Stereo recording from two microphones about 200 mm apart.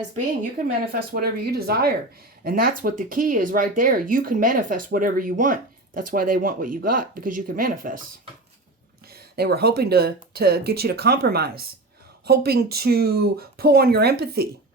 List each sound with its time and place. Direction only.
0.6 s speech: 40° right (ahead or behind)
9.3 s speech: 50° right (ahead or behind)